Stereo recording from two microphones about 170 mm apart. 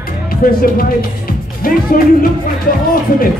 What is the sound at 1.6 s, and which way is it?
Music, 55° left (ahead or behind).